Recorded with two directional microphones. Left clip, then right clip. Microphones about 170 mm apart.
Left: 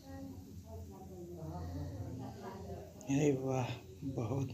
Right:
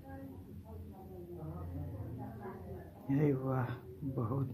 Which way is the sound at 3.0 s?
60° right (ahead or behind).